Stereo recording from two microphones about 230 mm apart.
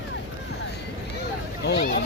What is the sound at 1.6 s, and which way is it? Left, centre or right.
Speech, left.